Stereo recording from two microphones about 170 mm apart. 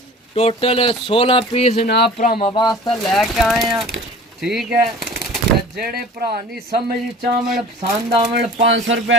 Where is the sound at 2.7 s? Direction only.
Centre (ahead or behind).